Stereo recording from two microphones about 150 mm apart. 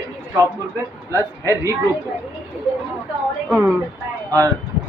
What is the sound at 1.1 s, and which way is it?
Speech, 20° right (ahead or behind).